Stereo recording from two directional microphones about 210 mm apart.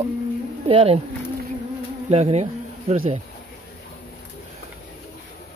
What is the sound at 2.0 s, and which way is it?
Speech, 30° right (ahead or behind).